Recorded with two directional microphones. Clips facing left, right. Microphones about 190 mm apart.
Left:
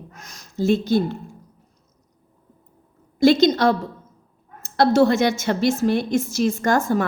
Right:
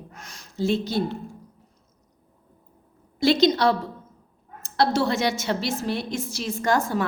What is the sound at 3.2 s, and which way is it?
A woman's voice, 50° left (ahead or behind).